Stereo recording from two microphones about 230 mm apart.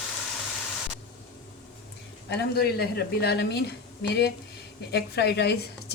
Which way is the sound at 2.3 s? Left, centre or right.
Left.